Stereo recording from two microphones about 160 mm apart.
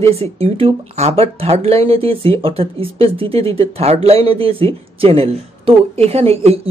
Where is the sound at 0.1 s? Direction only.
40° right (ahead or behind).